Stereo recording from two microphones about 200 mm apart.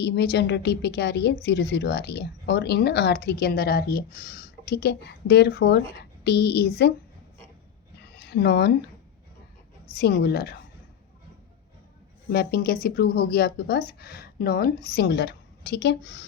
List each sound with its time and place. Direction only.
0.0 s speech: 55° left (ahead or behind)
8.1 s a sound: 50° left (ahead or behind)
9.9 s speech: 50° left (ahead or behind)
12.3 s speech: 50° left (ahead or behind)